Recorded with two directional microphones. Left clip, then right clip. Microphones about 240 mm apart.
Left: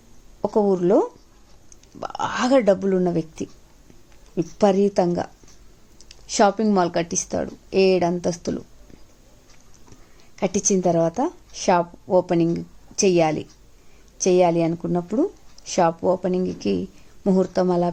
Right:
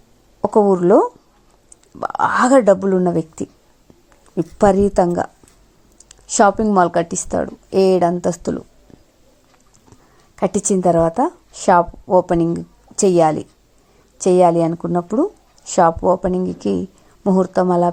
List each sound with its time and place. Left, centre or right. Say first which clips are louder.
0.4 s a woman's voice: right 6 dB; centre
10.3 s a woman's voice: right 4 dB; centre